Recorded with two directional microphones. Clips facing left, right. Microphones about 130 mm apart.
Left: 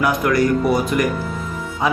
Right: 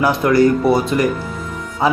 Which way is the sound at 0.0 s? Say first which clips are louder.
Right 4 dB; 30° right (ahead or behind).